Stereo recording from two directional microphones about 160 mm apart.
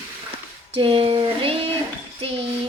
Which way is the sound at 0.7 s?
35° right (ahead or behind).